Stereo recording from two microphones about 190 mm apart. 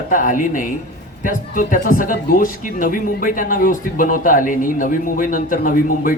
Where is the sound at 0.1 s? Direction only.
45° left (ahead or behind).